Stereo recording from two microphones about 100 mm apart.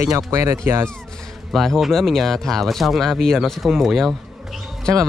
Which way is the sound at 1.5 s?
Centre (ahead or behind).